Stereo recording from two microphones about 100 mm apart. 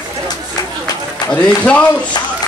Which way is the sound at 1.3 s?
10° left (ahead or behind).